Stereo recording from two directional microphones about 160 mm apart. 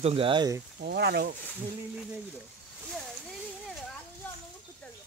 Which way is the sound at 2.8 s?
Centre (ahead or behind).